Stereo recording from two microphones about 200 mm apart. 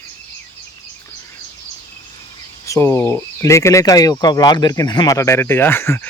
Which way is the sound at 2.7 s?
15° left (ahead or behind).